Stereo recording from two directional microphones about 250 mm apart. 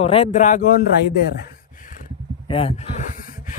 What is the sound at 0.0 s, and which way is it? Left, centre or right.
Speech, left.